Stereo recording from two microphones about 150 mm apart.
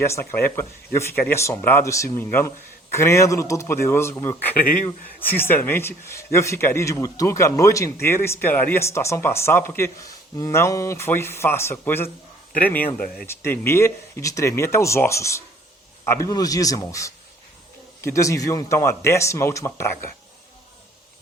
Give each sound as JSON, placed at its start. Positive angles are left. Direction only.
{"t": 0.0, "sound": "speech", "side_deg": 15}